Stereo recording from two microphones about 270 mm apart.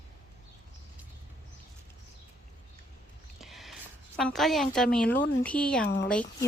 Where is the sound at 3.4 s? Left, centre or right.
Centre.